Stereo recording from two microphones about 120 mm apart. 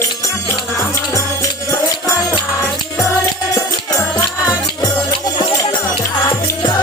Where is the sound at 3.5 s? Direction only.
30° left (ahead or behind).